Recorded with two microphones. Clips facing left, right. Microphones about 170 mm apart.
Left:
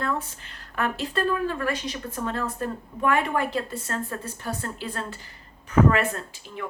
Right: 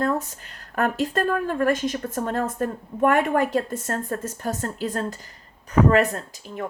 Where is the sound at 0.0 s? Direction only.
40° right (ahead or behind).